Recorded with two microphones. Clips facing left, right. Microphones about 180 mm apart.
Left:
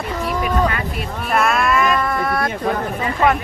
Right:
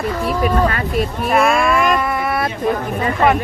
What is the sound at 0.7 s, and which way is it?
Speech, 40° right (ahead or behind).